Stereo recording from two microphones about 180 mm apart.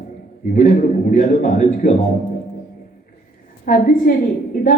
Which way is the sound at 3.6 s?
50° left (ahead or behind).